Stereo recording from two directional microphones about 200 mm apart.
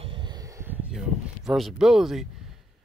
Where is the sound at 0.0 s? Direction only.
25° right (ahead or behind); by 2.4 s centre (ahead or behind).